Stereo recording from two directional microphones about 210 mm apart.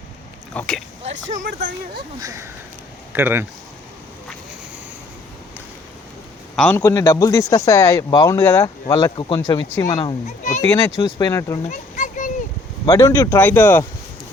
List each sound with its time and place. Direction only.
0.6 s speech: 5° left (ahead or behind)
2.1 s speech: 15° right (ahead or behind)
6.6 s a man's voice: 10° left (ahead or behind)
10.2 s speech: 35° left (ahead or behind)
10.7 s a man's voice: 15° left (ahead or behind)
11.7 s a sound: 40° left (ahead or behind)
12.8 s a man's voice: 15° left (ahead or behind)